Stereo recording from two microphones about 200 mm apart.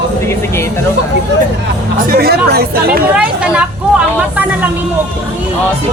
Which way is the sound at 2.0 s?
50° right (ahead or behind).